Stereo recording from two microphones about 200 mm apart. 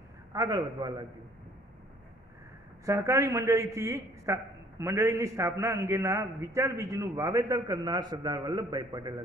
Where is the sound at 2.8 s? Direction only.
15° right (ahead or behind).